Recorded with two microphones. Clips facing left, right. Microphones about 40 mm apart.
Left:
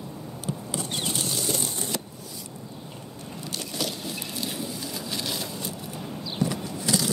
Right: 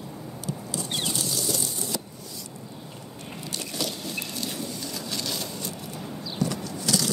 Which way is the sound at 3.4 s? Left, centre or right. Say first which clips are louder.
Even; centre.